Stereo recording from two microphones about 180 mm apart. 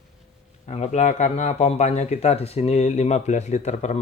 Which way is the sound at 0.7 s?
40° left (ahead or behind).